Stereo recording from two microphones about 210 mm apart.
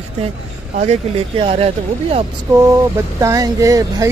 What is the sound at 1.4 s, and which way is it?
Speech, 25° right (ahead or behind).